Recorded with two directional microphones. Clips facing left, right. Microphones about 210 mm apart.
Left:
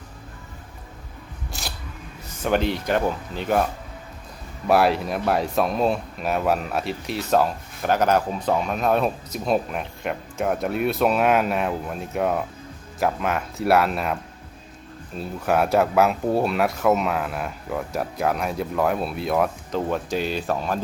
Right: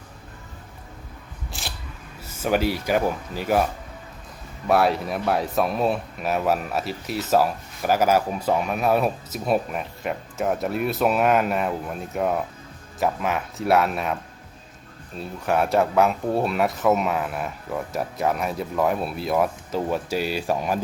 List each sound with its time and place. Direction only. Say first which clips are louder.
2.2 s speech: even; 5° right (ahead or behind)
4.6 s speech: left 1 dB; centre (ahead or behind)
15.2 s speech: left 1 dB; centre (ahead or behind)